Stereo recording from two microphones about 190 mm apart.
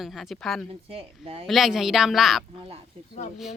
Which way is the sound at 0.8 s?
30° right (ahead or behind).